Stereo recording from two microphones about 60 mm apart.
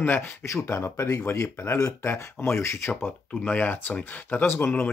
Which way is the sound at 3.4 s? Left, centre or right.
Left.